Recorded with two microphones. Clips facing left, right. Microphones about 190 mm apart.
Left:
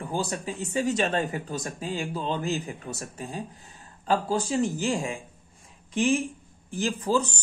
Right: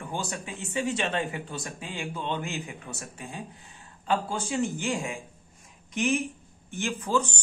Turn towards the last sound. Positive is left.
turn(degrees=35)  # may be behind; listen again after turning